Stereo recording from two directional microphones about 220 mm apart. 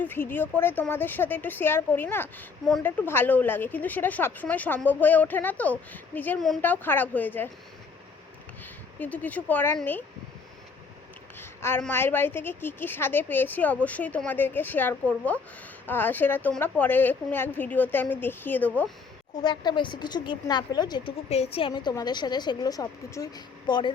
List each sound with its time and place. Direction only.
0.0 s speech: 10° left (ahead or behind)
8.6 s speech: 5° left (ahead or behind)
11.3 s speech: 10° left (ahead or behind)
19.4 s a woman's voice: 20° left (ahead or behind)